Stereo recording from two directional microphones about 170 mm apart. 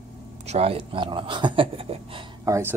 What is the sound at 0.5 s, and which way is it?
Speech, 35° right (ahead or behind).